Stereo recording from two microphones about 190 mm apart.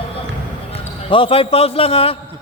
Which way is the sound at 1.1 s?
30° left (ahead or behind).